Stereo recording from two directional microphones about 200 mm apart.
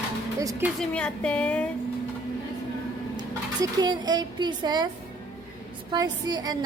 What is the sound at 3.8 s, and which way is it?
A woman's voice, 20° right (ahead or behind).